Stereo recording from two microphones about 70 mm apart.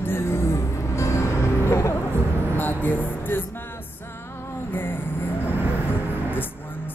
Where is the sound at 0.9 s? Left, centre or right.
Left.